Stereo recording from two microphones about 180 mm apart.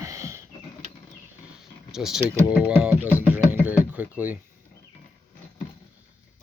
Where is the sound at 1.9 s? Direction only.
5° right (ahead or behind).